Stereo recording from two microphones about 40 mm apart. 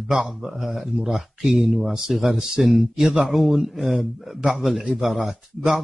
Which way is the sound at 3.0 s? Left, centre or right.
Right.